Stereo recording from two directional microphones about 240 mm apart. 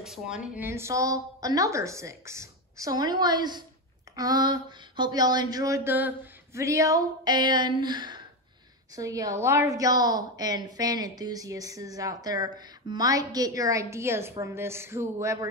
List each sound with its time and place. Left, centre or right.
0.0 s a woman's voice: centre